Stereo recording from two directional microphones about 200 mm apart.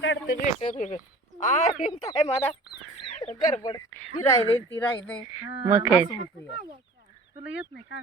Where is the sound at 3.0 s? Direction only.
25° left (ahead or behind).